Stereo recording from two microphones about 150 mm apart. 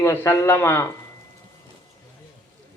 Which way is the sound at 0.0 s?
15° left (ahead or behind).